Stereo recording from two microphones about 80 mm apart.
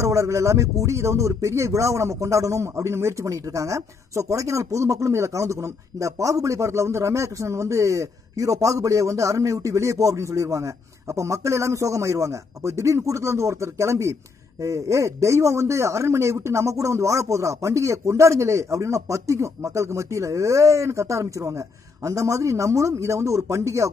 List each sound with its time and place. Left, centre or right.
0.0 s speech: right